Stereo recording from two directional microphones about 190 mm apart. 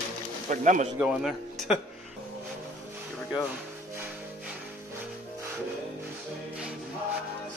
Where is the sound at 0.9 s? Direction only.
5° right (ahead or behind).